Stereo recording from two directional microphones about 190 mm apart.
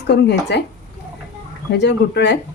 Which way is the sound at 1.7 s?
60° left (ahead or behind).